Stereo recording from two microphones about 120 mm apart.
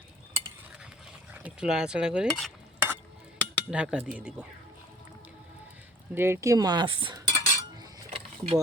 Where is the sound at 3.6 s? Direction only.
10° right (ahead or behind).